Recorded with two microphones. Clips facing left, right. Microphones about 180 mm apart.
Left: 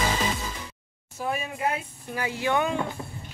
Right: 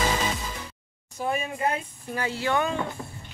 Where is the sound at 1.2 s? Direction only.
Centre (ahead or behind).